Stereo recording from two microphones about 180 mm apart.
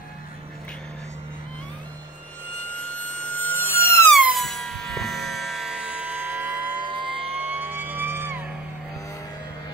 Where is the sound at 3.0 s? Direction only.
10° left (ahead or behind).